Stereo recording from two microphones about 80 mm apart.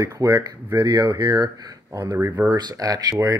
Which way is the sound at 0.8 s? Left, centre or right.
Right.